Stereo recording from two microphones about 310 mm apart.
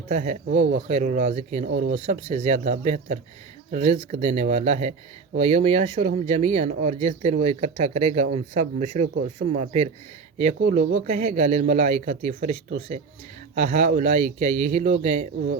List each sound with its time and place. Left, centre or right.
0.1 s speech: right
13.6 s speech: right
14.1 s speech: right
14.6 s speech: right